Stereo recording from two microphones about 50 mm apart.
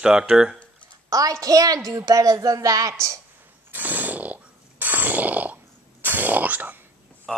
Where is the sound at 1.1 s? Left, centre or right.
Right.